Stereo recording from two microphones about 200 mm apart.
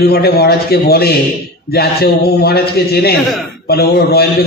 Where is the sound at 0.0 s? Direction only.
50° left (ahead or behind).